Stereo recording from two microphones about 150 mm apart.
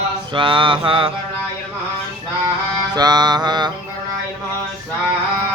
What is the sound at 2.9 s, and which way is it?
Mantra, 25° right (ahead or behind).